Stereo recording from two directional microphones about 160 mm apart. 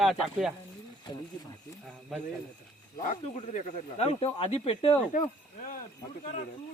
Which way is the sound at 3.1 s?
50° left (ahead or behind).